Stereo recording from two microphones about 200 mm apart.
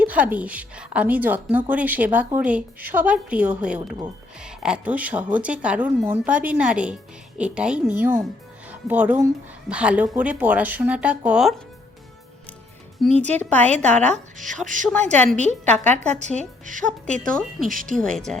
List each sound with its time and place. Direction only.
0.0 s a woman's voice: 5° right (ahead or behind)
13.1 s a woman's voice: 35° right (ahead or behind)
13.4 s a woman's voice: 10° left (ahead or behind)
14.1 s a woman's voice: 40° right (ahead or behind)
15.6 s a woman's voice: 5° left (ahead or behind)
16.1 s a woman's voice: 35° right (ahead or behind)
18.0 s speech: 5° left (ahead or behind)